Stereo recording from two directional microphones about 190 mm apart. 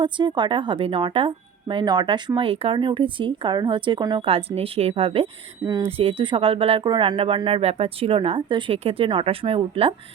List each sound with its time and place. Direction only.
0.0 s a woman's voice: 25° right (ahead or behind)